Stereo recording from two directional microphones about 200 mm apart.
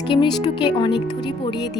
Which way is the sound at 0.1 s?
25° left (ahead or behind).